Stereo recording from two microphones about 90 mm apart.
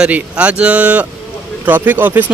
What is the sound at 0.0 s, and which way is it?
Speech, 15° right (ahead or behind).